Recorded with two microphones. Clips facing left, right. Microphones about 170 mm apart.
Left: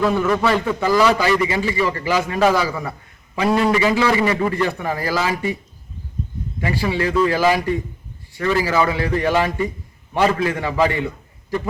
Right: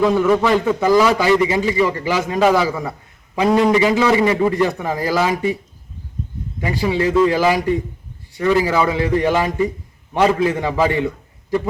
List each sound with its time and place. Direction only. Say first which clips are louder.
0.0 s a man's voice: right 3 dB; 15° right (ahead or behind)
6.6 s a man's voice: right 2 dB; 15° right (ahead or behind)